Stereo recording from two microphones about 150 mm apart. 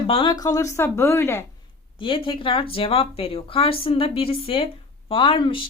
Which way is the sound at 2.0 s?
35° left (ahead or behind).